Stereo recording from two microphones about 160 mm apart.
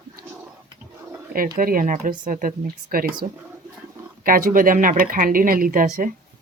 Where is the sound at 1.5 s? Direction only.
60° right (ahead or behind).